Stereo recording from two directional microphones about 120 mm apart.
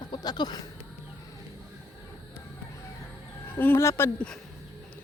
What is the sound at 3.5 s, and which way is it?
Speech, 20° left (ahead or behind).